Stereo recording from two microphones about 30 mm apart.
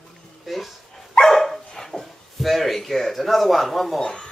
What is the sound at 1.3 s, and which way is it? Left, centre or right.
Dog, centre.